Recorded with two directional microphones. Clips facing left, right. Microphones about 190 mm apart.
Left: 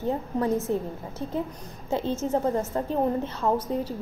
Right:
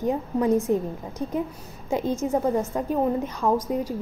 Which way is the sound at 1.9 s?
15° right (ahead or behind).